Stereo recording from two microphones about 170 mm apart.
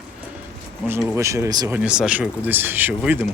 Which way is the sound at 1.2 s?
20° right (ahead or behind).